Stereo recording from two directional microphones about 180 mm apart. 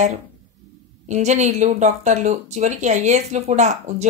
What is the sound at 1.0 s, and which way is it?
Speech, 40° right (ahead or behind).